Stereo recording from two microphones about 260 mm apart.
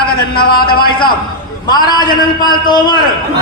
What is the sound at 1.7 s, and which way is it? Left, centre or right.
A man's voice, centre.